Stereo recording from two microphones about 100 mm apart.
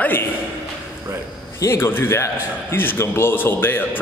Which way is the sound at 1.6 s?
25° left (ahead or behind).